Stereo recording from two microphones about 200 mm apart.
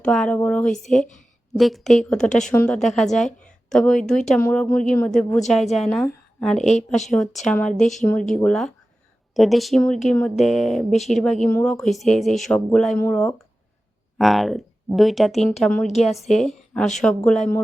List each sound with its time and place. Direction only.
0.0 s a woman's voice: 5° left (ahead or behind)
6.7 s speech: 35° left (ahead or behind)
7.1 s a woman's voice: centre (ahead or behind)